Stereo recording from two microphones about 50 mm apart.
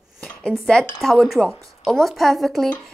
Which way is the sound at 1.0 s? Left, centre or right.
Centre.